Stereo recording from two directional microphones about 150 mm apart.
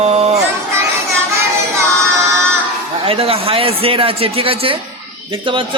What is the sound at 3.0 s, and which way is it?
A man's voice, 40° right (ahead or behind).